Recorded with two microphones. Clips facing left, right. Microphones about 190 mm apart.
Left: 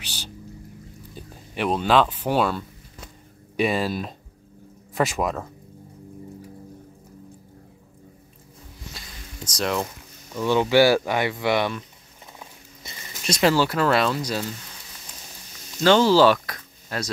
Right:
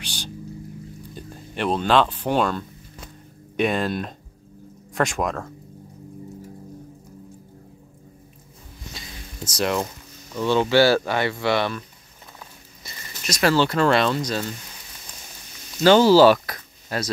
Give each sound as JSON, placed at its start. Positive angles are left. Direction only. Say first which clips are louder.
{"t": 0.0, "sound": "boat", "louder": "right 4 dB", "side_deg": 5}
{"t": 1.1, "sound": "speech", "louder": "even", "side_deg": 5}
{"t": 8.9, "sound": "a sound", "louder": "right 2 dB", "side_deg": -5}
{"t": 10.3, "sound": "speech", "louder": "even", "side_deg": 10}
{"t": 12.8, "sound": "a sound", "louder": "left 3 dB", "side_deg": 25}
{"t": 13.5, "sound": "speech", "louder": "right 2 dB", "side_deg": 5}
{"t": 15.8, "sound": "speech", "louder": "right 3 dB", "side_deg": -5}